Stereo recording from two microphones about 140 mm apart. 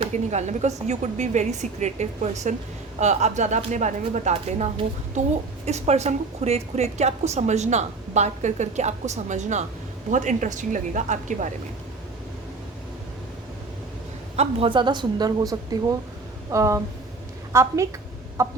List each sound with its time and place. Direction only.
0.0 s a woman's voice: 55° right (ahead or behind)
14.3 s a woman's voice: 40° right (ahead or behind); by 18.5 s 20° right (ahead or behind)